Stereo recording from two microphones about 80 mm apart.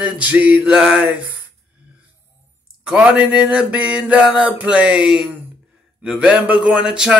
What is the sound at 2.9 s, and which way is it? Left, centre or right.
Music, centre.